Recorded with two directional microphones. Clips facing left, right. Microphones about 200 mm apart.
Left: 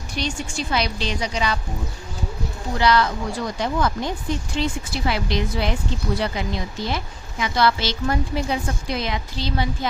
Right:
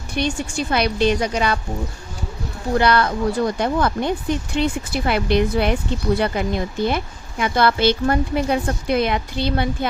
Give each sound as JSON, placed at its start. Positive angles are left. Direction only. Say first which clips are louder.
{"t": 0.1, "sound": "speech", "louder": "right 5 dB", "side_deg": -55}
{"t": 2.7, "sound": "speech", "louder": "right 2 dB", "side_deg": -55}